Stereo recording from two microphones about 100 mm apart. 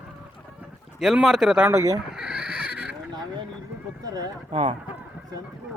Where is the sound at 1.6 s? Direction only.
30° right (ahead or behind).